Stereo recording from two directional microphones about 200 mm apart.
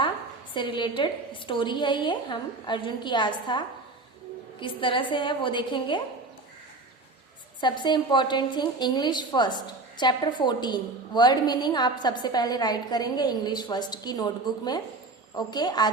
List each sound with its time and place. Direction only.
0.5 s a woman's voice: 25° left (ahead or behind)
4.6 s a woman's voice: 25° left (ahead or behind)
7.6 s a woman's voice: 25° left (ahead or behind)